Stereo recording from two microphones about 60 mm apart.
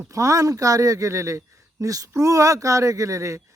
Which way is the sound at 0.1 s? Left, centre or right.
Right.